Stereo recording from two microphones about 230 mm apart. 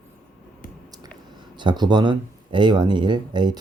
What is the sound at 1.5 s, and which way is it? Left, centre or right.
Speech, centre.